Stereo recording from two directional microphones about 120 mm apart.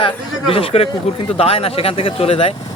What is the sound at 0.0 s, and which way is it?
A man's voice, 50° left (ahead or behind).